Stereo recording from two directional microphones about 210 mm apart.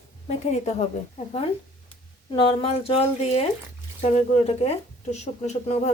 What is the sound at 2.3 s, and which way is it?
A woman's voice, 25° left (ahead or behind).